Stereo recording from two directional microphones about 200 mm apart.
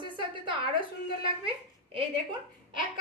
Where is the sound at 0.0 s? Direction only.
25° right (ahead or behind).